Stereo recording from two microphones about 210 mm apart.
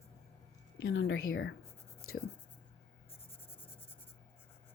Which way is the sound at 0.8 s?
65° left (ahead or behind).